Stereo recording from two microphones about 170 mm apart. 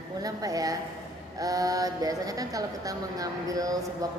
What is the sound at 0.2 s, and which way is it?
Speech, 20° right (ahead or behind).